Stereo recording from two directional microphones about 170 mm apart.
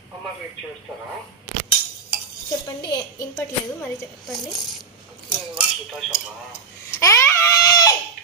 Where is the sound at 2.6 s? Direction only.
20° left (ahead or behind).